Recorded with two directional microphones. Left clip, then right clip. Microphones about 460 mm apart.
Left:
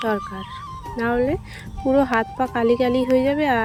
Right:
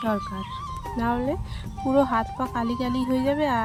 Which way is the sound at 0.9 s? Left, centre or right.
Centre.